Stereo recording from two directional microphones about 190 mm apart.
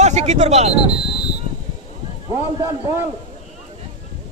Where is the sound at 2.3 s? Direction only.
20° right (ahead or behind).